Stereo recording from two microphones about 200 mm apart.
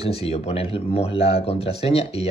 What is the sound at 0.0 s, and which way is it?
Speech, 30° left (ahead or behind).